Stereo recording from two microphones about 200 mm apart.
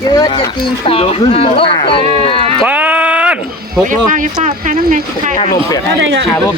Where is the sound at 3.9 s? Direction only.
40° right (ahead or behind).